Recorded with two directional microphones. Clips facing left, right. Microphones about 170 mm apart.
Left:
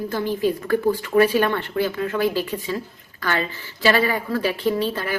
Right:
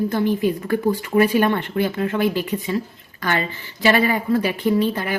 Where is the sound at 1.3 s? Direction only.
20° right (ahead or behind).